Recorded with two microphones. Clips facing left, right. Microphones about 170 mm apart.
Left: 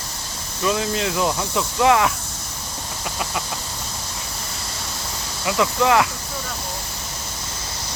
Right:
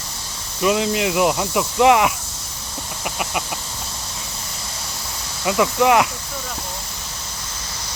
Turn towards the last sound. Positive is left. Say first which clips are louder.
# right 2 dB
turn(degrees=-20)  # may be behind; listen again after turning